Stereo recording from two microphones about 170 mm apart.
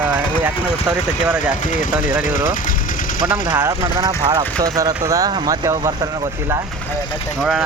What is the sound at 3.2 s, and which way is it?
A man's voice, 15° right (ahead or behind).